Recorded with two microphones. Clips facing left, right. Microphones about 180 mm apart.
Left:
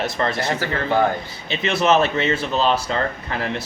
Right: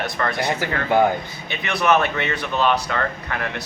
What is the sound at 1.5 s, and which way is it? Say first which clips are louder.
A man's voice: left 2 dB; 25° left (ahead or behind).